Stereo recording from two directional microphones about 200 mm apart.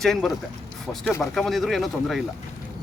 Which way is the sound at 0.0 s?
Centre (ahead or behind).